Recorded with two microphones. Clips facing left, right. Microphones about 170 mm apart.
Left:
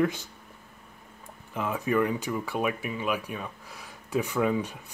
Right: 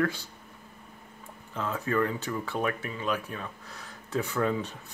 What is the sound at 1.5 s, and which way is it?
Speech, 15° left (ahead or behind).